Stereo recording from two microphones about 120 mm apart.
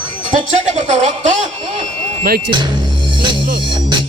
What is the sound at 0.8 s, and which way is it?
Speech, 85° right.